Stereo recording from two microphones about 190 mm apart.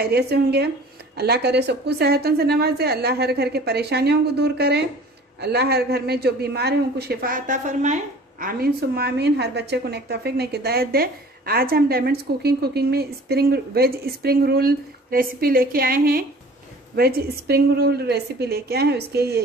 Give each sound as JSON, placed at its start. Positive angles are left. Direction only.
{"t": 0.0, "sound": "a man's voice", "side_deg": -60}